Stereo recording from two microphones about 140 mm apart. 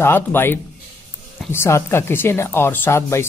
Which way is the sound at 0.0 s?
15° left (ahead or behind).